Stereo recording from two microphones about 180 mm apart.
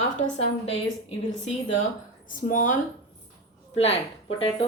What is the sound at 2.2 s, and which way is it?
Speech, 50° left (ahead or behind).